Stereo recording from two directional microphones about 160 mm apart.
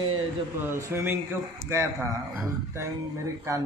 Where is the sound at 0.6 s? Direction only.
15° right (ahead or behind).